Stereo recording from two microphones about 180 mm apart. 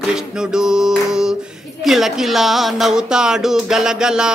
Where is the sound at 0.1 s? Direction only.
5° right (ahead or behind).